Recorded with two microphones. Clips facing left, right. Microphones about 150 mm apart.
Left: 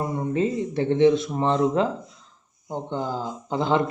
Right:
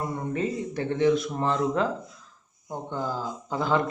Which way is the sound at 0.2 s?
25° left (ahead or behind).